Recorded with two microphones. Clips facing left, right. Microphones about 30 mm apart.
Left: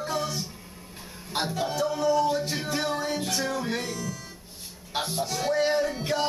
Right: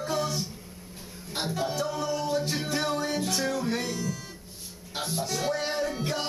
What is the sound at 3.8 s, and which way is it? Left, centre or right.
Speech, centre.